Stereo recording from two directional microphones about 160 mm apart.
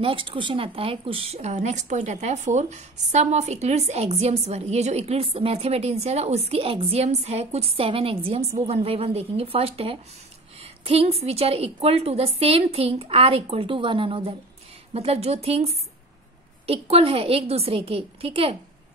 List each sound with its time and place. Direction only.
0.0 s a woman's voice: 35° right (ahead or behind)